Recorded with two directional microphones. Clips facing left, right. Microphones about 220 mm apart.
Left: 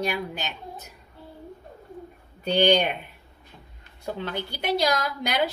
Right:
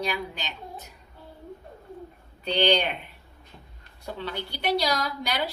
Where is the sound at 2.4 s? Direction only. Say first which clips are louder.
Left 3 dB; 45° left (ahead or behind).